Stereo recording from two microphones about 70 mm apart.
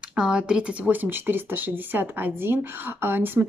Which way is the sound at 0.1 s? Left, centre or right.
Centre.